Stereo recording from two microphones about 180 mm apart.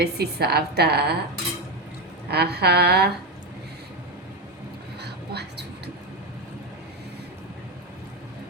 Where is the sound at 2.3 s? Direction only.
65° right (ahead or behind).